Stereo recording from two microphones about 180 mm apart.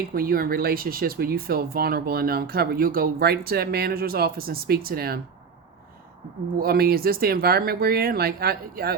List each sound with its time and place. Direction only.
0.1 s speech: 55° right (ahead or behind)
6.6 s speech: 55° right (ahead or behind)